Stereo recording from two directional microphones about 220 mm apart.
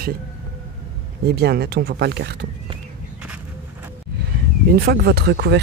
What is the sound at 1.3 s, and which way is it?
Speech, 45° right (ahead or behind).